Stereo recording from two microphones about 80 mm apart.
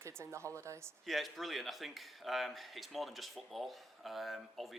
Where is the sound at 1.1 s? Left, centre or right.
Centre.